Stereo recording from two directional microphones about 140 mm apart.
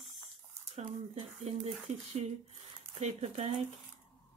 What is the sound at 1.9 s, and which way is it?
A woman's voice, 55° right (ahead or behind).